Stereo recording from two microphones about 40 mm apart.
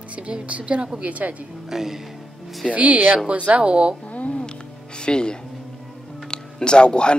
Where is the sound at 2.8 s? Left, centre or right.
Right.